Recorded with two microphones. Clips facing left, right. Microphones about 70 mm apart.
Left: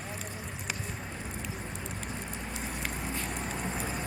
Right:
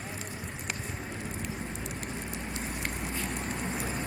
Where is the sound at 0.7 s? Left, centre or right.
Centre.